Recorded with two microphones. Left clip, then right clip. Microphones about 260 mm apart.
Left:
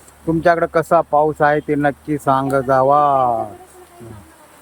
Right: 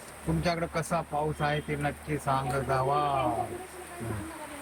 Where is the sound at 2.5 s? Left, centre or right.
Left.